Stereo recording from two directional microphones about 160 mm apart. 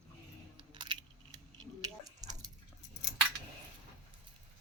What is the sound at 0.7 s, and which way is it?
Coin, 30° right (ahead or behind).